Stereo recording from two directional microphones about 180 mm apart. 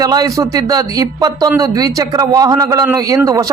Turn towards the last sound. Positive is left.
turn(degrees=-20)  # may be behind; listen again after turning